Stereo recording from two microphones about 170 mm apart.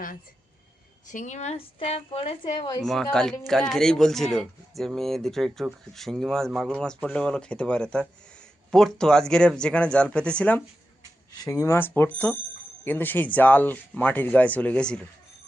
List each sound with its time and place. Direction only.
1.1 s a woman's voice: 45° left (ahead or behind); by 2.8 s 25° left (ahead or behind)
2.8 s speech: centre (ahead or behind)
11.4 s speech: 20° left (ahead or behind)